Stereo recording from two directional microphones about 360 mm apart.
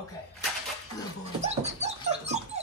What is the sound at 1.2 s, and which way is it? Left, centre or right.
Dog, centre.